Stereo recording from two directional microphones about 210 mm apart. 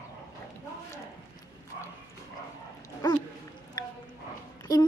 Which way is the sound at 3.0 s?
20° left (ahead or behind).